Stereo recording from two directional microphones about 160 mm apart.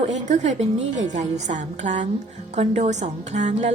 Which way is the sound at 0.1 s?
45° right (ahead or behind).